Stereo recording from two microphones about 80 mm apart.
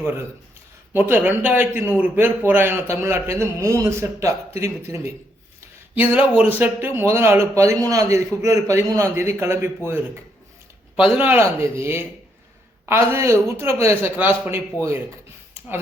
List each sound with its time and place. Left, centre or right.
0.0 s a man's voice: right
5.9 s speech: right
11.3 s speech: right